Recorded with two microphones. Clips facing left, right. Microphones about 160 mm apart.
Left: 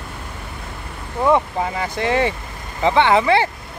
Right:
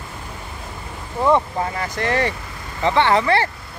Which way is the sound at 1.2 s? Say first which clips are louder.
Left 1 dB; 15° left (ahead or behind).